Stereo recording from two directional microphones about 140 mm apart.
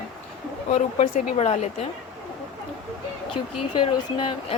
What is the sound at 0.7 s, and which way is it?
Speech, 90° left.